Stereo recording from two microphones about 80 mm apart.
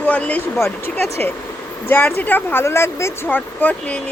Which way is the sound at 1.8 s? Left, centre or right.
Left.